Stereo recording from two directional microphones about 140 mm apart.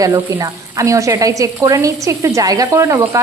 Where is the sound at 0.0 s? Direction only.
25° right (ahead or behind).